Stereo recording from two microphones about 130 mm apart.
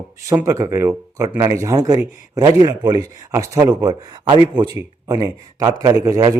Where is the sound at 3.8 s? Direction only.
30° right (ahead or behind).